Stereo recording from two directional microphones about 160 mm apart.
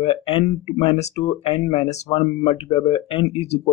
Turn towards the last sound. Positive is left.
turn(degrees=40)  # may be behind; listen again after turning